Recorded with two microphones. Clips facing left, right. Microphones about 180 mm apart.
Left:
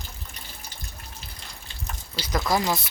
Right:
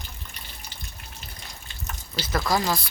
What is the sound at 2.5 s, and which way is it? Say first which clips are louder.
Speech: left 1 dB; 20° left (ahead or behind).